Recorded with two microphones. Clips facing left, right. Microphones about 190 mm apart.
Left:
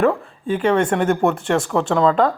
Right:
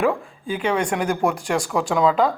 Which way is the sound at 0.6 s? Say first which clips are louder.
Left 5 dB; 5° left (ahead or behind).